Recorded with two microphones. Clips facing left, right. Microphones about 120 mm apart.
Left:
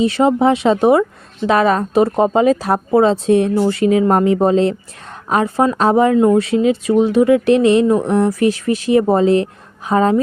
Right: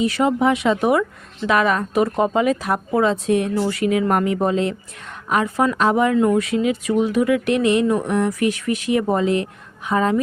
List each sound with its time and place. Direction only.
0.0 s speech: 30° left (ahead or behind)